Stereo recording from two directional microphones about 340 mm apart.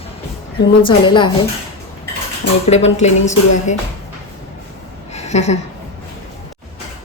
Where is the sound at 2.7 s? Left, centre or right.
Centre.